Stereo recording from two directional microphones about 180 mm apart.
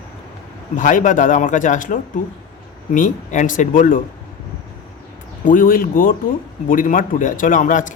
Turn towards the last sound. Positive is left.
turn(degrees=45)  # may be behind; listen again after turning